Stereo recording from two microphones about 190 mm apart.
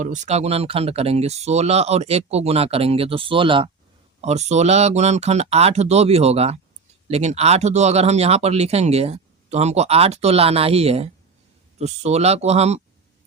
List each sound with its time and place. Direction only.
0.0 s speech: 40° right (ahead or behind)